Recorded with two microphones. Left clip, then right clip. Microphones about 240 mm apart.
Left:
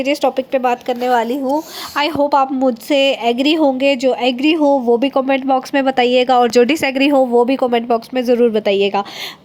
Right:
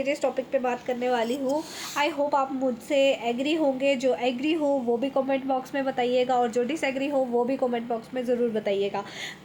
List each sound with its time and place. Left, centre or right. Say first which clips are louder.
0.0 s speech: left 10 dB; left